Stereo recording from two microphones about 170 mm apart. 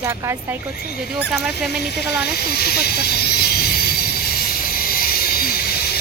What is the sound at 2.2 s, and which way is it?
Snake, 65° left (ahead or behind).